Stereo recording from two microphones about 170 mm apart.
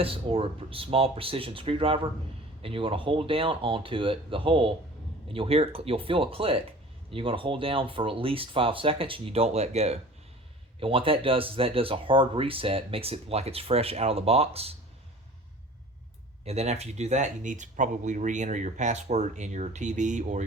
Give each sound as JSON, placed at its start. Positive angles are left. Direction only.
{"t": 0.0, "sound": "speech", "side_deg": -30}
{"t": 16.4, "sound": "speech", "side_deg": -35}